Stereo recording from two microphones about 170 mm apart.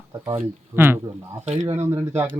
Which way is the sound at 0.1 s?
15° right (ahead or behind).